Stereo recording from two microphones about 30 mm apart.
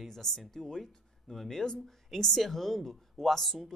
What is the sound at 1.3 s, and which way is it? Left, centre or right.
A man's voice, centre.